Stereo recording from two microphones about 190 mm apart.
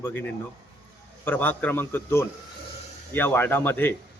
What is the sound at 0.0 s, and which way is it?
Speech, 10° left (ahead or behind).